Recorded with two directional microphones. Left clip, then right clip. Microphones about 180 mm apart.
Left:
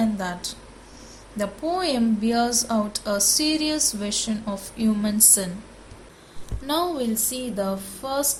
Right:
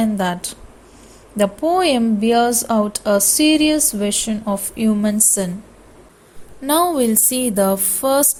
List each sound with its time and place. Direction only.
0.0 s a sound: 40° right (ahead or behind)
1.4 s a woman's voice: 35° right (ahead or behind)
6.7 s speech: 45° right (ahead or behind)